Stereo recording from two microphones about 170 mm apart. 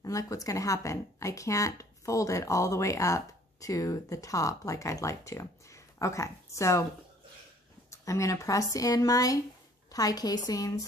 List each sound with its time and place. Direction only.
0.0 s speech: 20° left (ahead or behind)
7.9 s speech: 20° left (ahead or behind)